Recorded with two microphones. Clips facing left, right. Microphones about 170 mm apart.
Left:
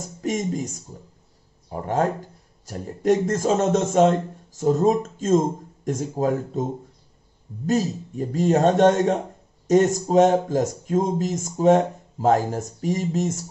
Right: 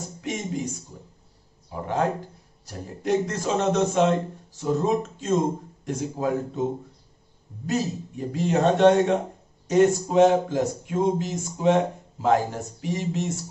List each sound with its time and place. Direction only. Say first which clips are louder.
0.2 s speech: left 4 dB; 45° left (ahead or behind)
8.3 s speech: left 3 dB; 40° left (ahead or behind)